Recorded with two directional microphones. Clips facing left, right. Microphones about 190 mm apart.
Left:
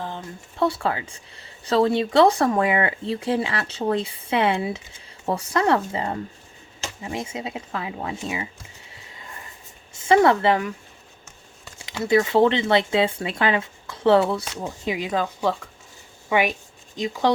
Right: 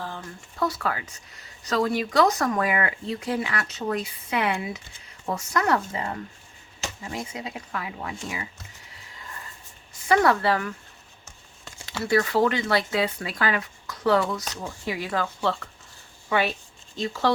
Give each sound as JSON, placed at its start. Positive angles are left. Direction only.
{"t": 0.0, "sound": "speech", "side_deg": 20}
{"t": 8.9, "sound": "sniff", "side_deg": 25}
{"t": 9.9, "sound": "speech", "side_deg": 25}
{"t": 11.9, "sound": "speech", "side_deg": 20}